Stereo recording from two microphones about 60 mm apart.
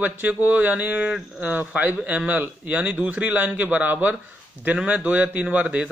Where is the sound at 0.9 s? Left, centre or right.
Centre.